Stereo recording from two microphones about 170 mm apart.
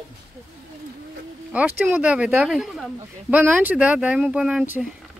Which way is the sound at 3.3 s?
10° right (ahead or behind).